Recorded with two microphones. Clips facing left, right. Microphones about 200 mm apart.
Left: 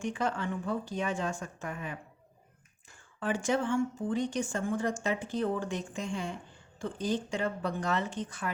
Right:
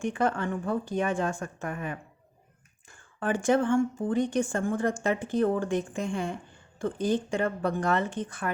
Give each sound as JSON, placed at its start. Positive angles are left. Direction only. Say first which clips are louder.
{"t": 0.0, "sound": "a woman's voice", "louder": "right 5 dB", "side_deg": -55}
{"t": 3.2, "sound": "a woman's voice", "louder": "right 5 dB", "side_deg": -55}